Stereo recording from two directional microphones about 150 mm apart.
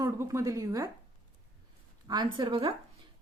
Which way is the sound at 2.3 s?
30° right (ahead or behind).